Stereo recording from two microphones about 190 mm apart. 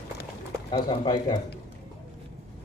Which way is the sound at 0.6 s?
25° left (ahead or behind).